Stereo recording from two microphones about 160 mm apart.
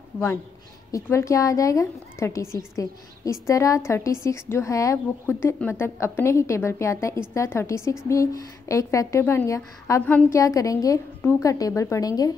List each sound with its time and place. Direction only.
0.9 s a woman's voice: 20° left (ahead or behind)